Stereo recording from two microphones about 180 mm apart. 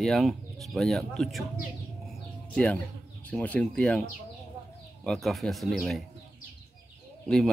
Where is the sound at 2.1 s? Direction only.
5° left (ahead or behind).